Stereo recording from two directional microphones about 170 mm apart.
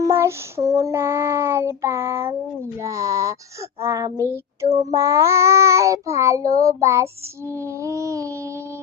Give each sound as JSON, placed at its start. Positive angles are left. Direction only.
{"t": 0.0, "sound": "child singing", "side_deg": -15}
{"t": 2.7, "sound": "speech", "side_deg": -20}
{"t": 3.8, "sound": "child singing", "side_deg": -20}